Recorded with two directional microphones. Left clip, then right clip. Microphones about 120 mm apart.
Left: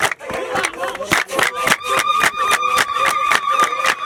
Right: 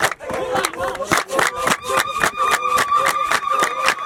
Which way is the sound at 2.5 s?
20° left (ahead or behind).